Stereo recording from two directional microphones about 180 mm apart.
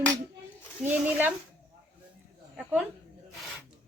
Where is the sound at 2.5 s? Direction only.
5° right (ahead or behind).